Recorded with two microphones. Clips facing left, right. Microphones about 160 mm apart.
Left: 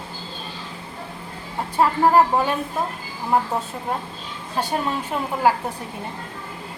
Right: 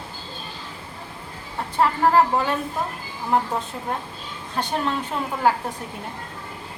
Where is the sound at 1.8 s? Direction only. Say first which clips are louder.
Left 2 dB; 15° left (ahead or behind).